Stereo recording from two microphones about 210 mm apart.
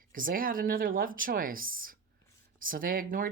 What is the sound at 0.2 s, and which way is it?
Speech, 40° right (ahead or behind).